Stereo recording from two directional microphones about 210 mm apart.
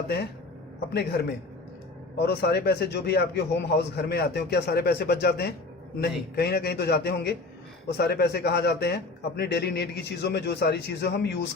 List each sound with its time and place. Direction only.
2.1 s a man's voice: 50° left (ahead or behind)